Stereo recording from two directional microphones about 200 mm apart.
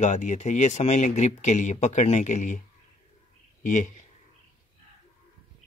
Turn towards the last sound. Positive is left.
turn(degrees=40)  # may be behind; listen again after turning